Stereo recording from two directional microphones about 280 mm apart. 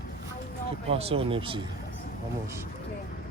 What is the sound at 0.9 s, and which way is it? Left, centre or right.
Speech, right.